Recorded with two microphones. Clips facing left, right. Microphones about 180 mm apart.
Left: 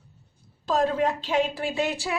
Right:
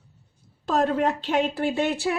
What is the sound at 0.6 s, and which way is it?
A woman's voice, 60° right (ahead or behind).